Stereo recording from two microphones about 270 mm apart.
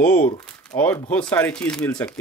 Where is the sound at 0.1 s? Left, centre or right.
Left.